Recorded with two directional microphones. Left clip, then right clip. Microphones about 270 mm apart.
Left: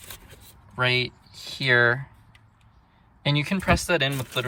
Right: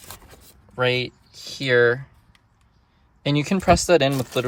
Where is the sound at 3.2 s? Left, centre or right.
Centre.